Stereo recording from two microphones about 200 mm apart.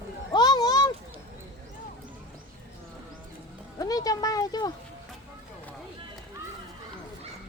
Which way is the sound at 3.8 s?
20° left (ahead or behind).